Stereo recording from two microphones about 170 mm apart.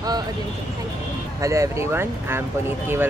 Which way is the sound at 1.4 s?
20° right (ahead or behind).